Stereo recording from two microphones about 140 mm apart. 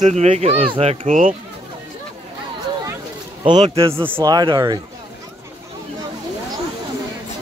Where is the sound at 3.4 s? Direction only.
35° right (ahead or behind).